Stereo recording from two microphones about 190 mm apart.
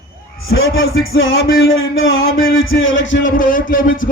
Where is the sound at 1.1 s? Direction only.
90° left.